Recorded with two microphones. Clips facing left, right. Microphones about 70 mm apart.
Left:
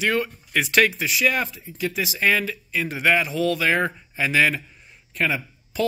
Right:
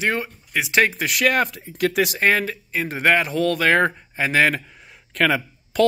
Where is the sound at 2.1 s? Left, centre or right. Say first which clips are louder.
Right 2 dB; right.